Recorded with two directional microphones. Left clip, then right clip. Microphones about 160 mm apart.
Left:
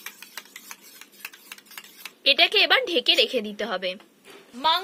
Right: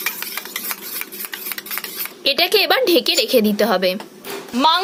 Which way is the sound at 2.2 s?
Centre (ahead or behind).